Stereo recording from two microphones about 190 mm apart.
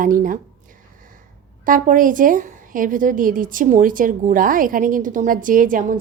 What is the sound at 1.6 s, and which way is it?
A woman's voice, 45° right (ahead or behind).